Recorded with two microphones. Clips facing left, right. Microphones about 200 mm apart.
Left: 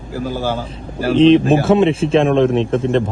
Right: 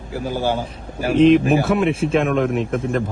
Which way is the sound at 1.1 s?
30° left (ahead or behind).